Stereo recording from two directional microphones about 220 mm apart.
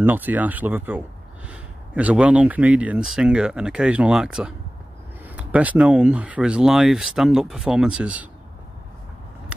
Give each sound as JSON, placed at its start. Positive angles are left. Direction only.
{"t": 0.0, "sound": "speech", "side_deg": -10}